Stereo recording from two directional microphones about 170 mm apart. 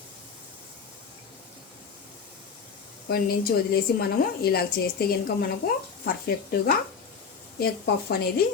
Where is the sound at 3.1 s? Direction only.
60° left (ahead or behind).